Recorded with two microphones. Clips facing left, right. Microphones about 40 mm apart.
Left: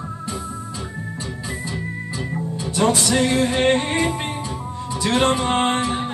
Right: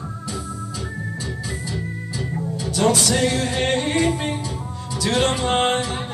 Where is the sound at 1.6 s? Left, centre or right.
Left.